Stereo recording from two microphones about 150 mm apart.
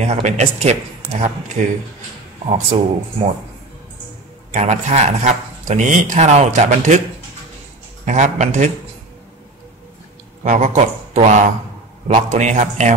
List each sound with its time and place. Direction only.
0.0 s speech: 50° right (ahead or behind)
1.6 s speech: 60° right (ahead or behind)
2.5 s speech: 50° right (ahead or behind)
4.5 s speech: 50° right (ahead or behind)
8.0 s speech: 50° right (ahead or behind)
10.4 s speech: 55° right (ahead or behind)